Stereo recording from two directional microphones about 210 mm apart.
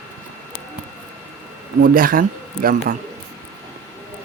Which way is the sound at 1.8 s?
45° right (ahead or behind).